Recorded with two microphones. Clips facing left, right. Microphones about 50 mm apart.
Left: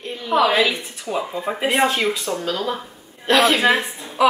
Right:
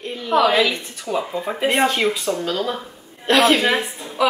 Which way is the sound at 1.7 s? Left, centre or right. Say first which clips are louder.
Even; centre.